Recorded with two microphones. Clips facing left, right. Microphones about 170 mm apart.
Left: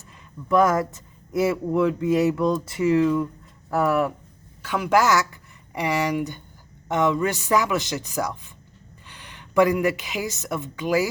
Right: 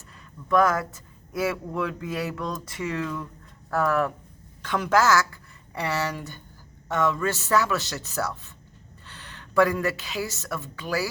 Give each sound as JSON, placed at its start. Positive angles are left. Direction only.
{"t": 0.4, "sound": "a man's voice", "side_deg": 25}